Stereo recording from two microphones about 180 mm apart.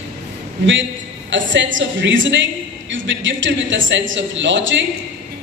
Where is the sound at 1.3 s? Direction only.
90° right.